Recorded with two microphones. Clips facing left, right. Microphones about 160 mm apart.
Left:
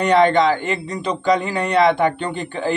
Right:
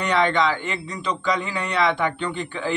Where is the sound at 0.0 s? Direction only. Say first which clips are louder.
Left 6 dB; 45° left (ahead or behind).